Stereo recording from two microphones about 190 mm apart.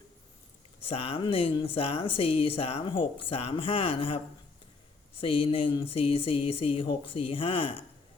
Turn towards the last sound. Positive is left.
turn(degrees=30)  # may be behind; listen again after turning